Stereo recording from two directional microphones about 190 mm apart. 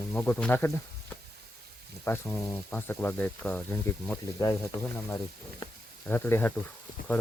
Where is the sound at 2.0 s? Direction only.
10° left (ahead or behind).